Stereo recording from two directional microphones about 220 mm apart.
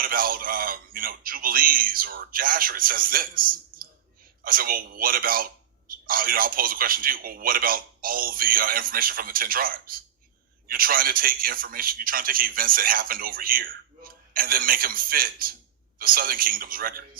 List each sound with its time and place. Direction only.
0.0 s a man's voice: 40° right (ahead or behind)